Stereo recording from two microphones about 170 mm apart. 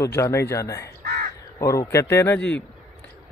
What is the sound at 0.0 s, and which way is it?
Speech, 15° left (ahead or behind).